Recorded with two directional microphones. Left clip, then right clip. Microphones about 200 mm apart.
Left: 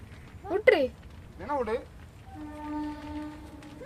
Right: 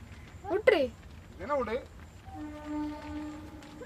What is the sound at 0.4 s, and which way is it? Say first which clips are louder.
Speech: left 3 dB; centre (ahead or behind).